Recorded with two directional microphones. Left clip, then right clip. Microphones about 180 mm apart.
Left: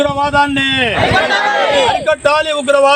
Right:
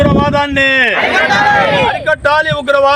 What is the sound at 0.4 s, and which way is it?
Speech, 20° right (ahead or behind).